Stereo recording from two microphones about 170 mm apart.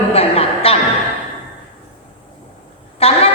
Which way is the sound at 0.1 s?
35° left (ahead or behind).